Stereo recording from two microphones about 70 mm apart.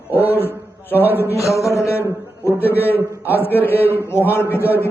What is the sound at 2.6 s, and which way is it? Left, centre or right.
A man's voice, left.